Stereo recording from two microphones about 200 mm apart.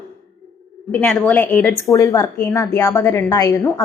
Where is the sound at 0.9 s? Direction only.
5° left (ahead or behind).